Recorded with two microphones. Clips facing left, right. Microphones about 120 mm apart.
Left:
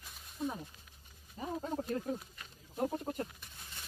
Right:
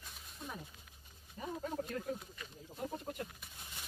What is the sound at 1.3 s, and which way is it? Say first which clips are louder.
Speech: left 2 dB; 30° left (ahead or behind).